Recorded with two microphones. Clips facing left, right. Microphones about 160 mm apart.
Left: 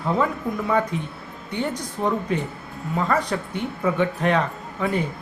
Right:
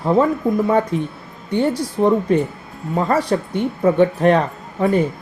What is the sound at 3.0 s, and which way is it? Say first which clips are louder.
A woman's voice: right 6 dB; 30° right (ahead or behind).